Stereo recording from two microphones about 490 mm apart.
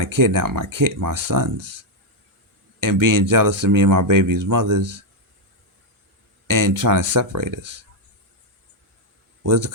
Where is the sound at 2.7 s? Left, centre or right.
Right.